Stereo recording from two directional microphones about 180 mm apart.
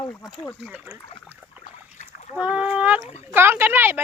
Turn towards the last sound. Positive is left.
turn(degrees=-10)  # may be behind; listen again after turning